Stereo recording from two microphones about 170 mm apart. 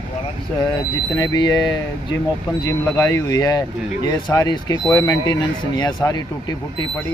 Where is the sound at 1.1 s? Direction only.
25° left (ahead or behind).